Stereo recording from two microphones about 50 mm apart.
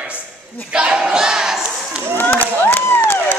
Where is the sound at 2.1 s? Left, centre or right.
Left.